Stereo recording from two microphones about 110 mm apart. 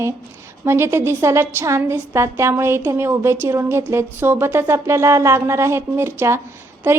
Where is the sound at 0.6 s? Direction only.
25° right (ahead or behind).